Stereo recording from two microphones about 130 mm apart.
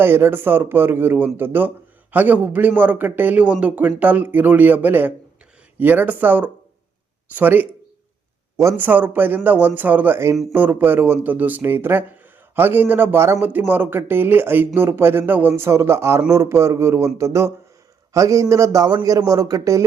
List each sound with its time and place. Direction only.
0.0 s a man's voice: 15° right (ahead or behind)